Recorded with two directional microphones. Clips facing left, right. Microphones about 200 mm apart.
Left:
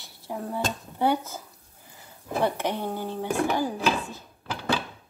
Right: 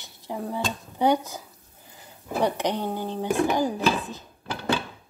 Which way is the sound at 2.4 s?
15° right (ahead or behind).